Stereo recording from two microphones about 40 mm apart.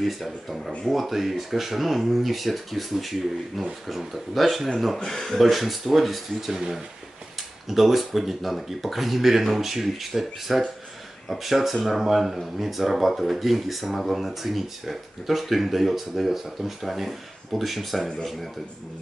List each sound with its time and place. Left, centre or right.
0.0 s speech: centre
4.9 s speech: centre